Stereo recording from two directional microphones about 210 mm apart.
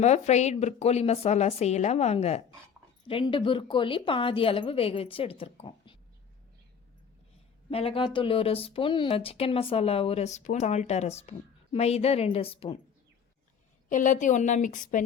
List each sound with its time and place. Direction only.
0.0 s a woman's voice: 30° left (ahead or behind)
7.7 s a woman's voice: 25° left (ahead or behind)
13.9 s a woman's voice: 35° left (ahead or behind)